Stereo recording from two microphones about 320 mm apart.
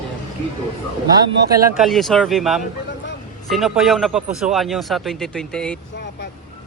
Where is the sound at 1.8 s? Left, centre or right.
Centre.